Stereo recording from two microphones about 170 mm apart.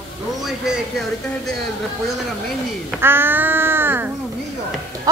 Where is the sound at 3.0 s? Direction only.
15° right (ahead or behind).